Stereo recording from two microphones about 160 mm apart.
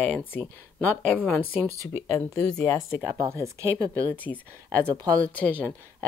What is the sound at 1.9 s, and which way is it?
Speech, 15° left (ahead or behind).